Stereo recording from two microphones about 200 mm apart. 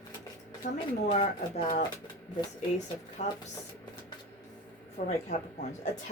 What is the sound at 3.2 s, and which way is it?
Speech, 35° left (ahead or behind).